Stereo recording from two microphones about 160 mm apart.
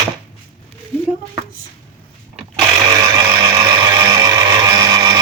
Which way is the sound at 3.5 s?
25° right (ahead or behind).